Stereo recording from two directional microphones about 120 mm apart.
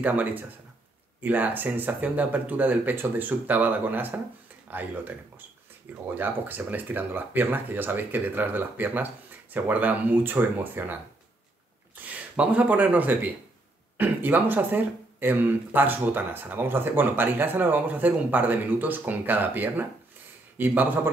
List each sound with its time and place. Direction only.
0.0 s speech: 15° right (ahead or behind)
6.1 s speech: 15° right (ahead or behind)
12.0 s speech: 15° right (ahead or behind)